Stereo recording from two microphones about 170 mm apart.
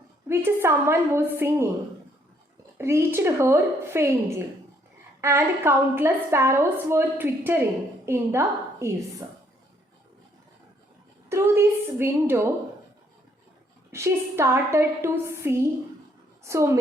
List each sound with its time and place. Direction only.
0.3 s a woman's voice: 15° right (ahead or behind)
2.7 s a woman's voice: 15° right (ahead or behind)
11.3 s a woman's voice: 15° right (ahead or behind)
13.9 s a woman's voice: 15° right (ahead or behind)